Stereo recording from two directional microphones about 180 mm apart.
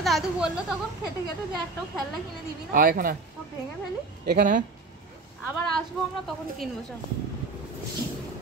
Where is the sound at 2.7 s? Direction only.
55° right (ahead or behind).